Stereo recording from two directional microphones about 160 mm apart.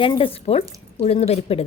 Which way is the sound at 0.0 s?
35° left (ahead or behind).